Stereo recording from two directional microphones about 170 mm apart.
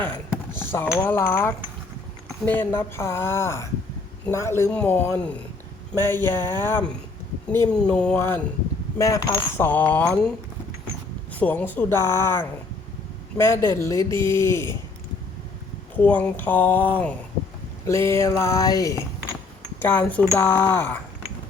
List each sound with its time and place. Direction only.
0.0 s a sound: 10° left (ahead or behind)
0.9 s speech: 10° left (ahead or behind)
16.0 s speech: 10° left (ahead or behind)
20.3 s speech: 15° left (ahead or behind)